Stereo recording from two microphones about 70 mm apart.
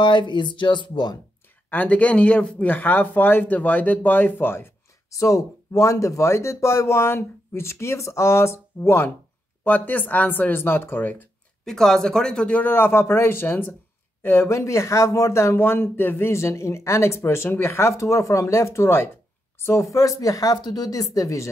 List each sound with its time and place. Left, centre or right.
0.2 s speech: left
1.7 s speech: left
5.1 s speech: left
9.7 s speech: left
11.6 s speech: centre
12.7 s speech: left